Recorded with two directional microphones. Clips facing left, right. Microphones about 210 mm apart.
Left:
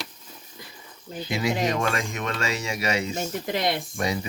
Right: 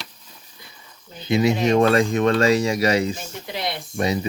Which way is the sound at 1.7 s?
35° right (ahead or behind).